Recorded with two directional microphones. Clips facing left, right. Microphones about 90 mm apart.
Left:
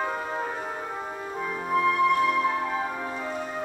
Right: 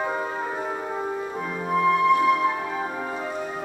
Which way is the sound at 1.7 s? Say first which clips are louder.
Right 3 dB; 5° right (ahead or behind).